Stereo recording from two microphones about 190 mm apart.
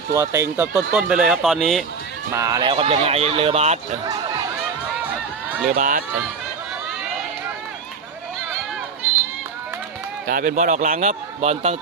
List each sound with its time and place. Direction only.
0.1 s speech: 15° right (ahead or behind)
0.9 s speech: 5° right (ahead or behind)
2.3 s speech: 20° right (ahead or behind)
5.7 s speech: 45° right (ahead or behind)
10.2 s speech: 45° right (ahead or behind)